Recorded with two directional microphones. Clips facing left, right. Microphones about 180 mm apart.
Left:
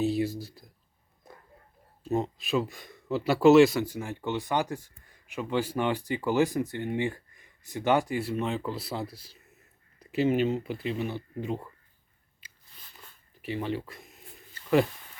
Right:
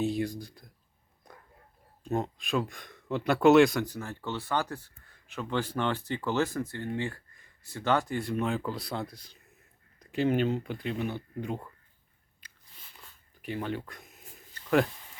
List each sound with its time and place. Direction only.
0.0 s speech: 5° left (ahead or behind)
2.0 s speech: centre (ahead or behind)
13.0 s a sound: centre (ahead or behind)